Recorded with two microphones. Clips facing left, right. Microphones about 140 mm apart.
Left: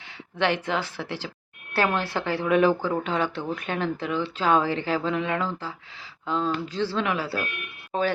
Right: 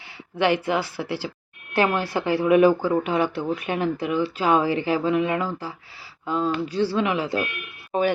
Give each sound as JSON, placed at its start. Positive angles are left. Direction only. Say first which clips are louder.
{"t": 0.3, "sound": "speech", "louder": "right 4 dB", "side_deg": -10}